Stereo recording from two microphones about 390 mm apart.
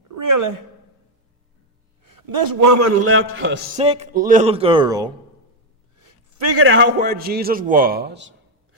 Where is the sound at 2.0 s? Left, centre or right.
Right.